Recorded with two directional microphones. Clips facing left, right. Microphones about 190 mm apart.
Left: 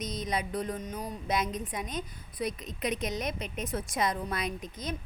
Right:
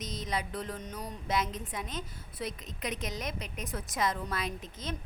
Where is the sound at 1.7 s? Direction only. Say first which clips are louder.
Left 3 dB; 15° left (ahead or behind).